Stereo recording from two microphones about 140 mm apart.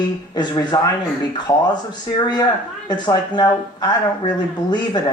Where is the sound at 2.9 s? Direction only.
30° left (ahead or behind).